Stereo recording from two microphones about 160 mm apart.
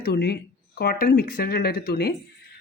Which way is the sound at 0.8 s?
70° left (ahead or behind).